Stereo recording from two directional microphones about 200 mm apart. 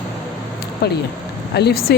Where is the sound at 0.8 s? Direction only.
55° left (ahead or behind).